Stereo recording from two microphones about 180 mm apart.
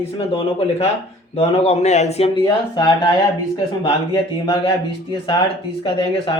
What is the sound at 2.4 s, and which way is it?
Speech, 20° left (ahead or behind).